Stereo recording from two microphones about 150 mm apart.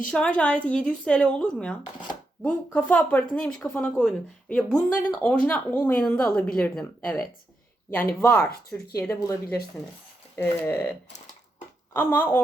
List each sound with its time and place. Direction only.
0.1 s speech: 5° left (ahead or behind)
11.9 s speech: 15° left (ahead or behind)